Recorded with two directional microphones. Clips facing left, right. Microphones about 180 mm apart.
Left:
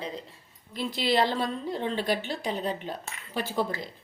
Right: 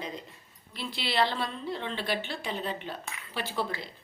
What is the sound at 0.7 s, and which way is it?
A woman's voice, 45° left (ahead or behind).